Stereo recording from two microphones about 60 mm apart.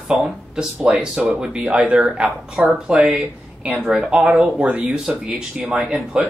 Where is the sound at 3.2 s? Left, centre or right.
Right; by 6.2 s centre.